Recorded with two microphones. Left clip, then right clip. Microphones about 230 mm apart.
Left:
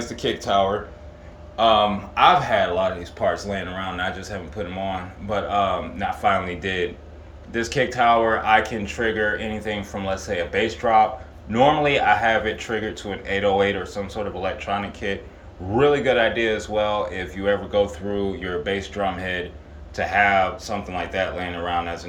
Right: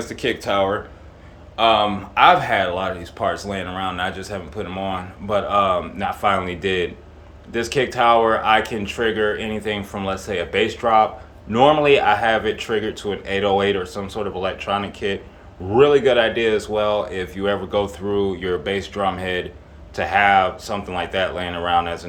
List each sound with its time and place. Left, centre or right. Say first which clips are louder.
0.0 s speech: right 2 dB; centre